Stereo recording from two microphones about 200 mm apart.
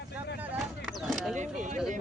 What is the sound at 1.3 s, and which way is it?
Speech, 35° right (ahead or behind).